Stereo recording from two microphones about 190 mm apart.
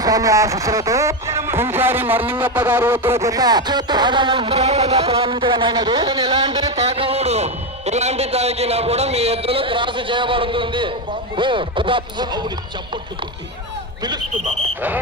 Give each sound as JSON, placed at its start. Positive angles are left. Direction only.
{"t": 0.0, "sound": "music", "side_deg": -20}
{"t": 2.4, "sound": "speech", "side_deg": -10}
{"t": 6.2, "sound": "a man's voice", "side_deg": -35}